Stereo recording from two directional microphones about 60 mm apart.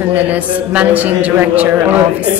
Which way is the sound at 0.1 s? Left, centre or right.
Right.